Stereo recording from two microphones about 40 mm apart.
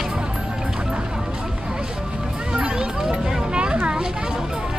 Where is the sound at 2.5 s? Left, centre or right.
Right.